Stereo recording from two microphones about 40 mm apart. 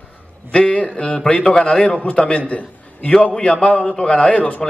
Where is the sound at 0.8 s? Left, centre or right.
Left.